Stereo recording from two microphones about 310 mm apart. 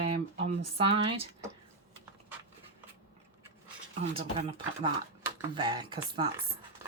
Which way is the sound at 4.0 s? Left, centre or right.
Centre.